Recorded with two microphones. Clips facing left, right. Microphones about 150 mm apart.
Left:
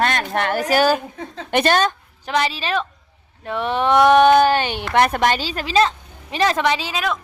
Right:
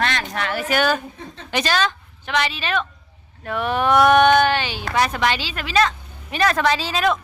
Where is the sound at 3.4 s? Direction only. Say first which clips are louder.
Left 1 dB; 25° left (ahead or behind); by 4.8 s 45° left (ahead or behind).